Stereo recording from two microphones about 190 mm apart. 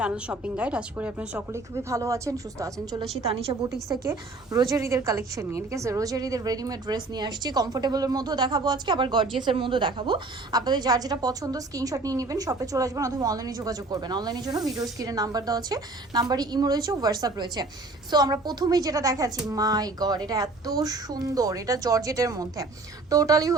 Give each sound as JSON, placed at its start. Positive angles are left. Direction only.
{"t": 0.0, "sound": "a woman's voice", "side_deg": -5}